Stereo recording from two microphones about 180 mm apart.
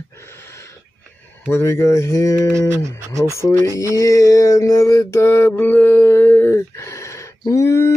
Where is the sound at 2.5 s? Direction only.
15° right (ahead or behind).